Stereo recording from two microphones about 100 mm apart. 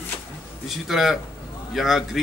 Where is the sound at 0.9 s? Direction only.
Centre (ahead or behind).